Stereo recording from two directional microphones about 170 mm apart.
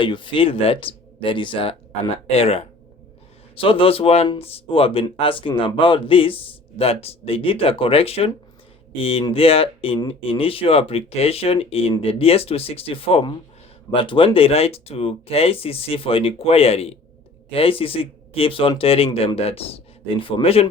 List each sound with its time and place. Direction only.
0.0 s speech: 30° left (ahead or behind)